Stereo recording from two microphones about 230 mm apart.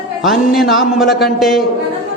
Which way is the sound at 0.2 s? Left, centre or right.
Centre.